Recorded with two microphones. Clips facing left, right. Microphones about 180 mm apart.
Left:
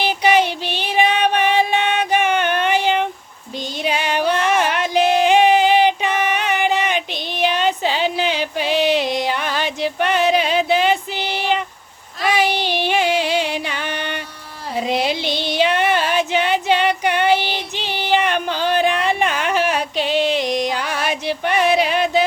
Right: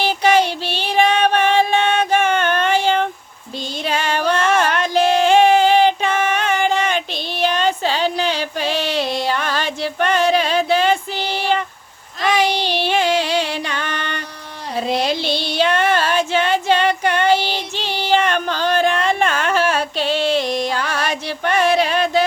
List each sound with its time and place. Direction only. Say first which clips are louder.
0.1 s female singing: even; 15° left (ahead or behind)
3.8 s music: even; 15° left (ahead or behind)
12.2 s child singing: right 1 dB; 5° left (ahead or behind)
12.6 s music: right 1 dB; 15° left (ahead or behind)
14.8 s a sound: even; 10° left (ahead or behind)
15.2 s female singing: even; 15° left (ahead or behind)
19.2 s music: right 1 dB; 15° left (ahead or behind)